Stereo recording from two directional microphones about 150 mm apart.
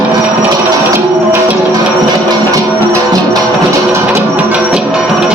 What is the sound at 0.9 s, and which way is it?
Tabla, 15° right (ahead or behind).